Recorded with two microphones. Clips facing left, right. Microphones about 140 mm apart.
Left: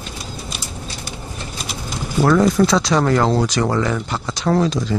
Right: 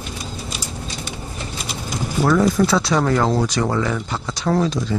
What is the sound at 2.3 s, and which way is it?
Speech, 85° left.